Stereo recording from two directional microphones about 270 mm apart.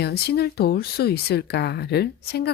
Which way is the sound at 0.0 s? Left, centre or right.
Left.